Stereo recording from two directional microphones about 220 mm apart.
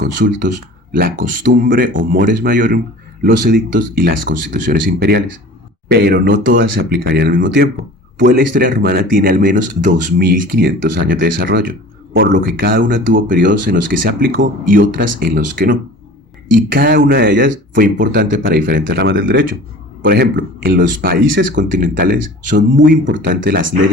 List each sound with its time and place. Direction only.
0.0 s speech: 40° right (ahead or behind)
18.2 s speech: 55° right (ahead or behind)
21.6 s speech: 35° right (ahead or behind)
23.0 s speech: 55° right (ahead or behind)